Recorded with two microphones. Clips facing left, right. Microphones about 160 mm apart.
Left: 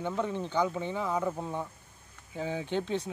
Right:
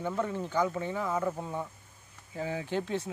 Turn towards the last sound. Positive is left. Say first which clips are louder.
# left 1 dB
turn(degrees=-5)  # may be behind; listen again after turning